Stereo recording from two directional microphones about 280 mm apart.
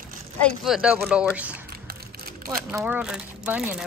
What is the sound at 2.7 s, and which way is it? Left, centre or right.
Speech, centre.